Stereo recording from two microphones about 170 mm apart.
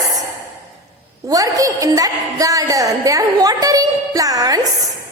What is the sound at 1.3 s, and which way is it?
A woman's voice, 20° right (ahead or behind).